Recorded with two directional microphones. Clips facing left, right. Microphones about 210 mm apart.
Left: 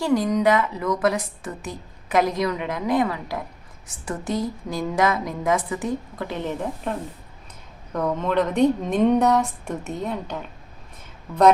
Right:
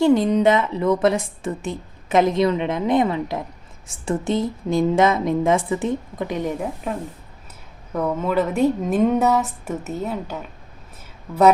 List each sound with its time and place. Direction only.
0.0 s a woman's voice: 25° right (ahead or behind)
7.9 s a woman's voice: 5° right (ahead or behind)